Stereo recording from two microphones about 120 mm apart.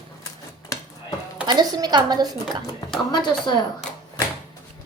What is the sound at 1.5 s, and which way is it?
A woman's voice, 35° right (ahead or behind).